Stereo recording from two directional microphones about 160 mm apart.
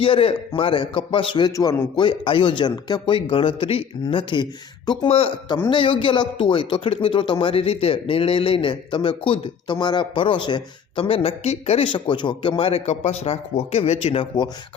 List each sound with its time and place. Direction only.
0.0 s a man's voice: 35° left (ahead or behind)